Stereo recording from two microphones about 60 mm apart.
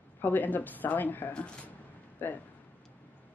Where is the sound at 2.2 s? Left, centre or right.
Left.